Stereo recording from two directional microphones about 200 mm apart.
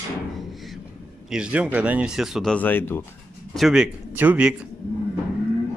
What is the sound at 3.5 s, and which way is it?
Speech, centre (ahead or behind).